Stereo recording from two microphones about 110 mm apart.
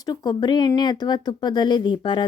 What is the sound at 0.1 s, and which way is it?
Speech, 40° left (ahead or behind).